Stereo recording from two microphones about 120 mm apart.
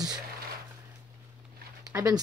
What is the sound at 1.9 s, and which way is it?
Speech, 30° right (ahead or behind).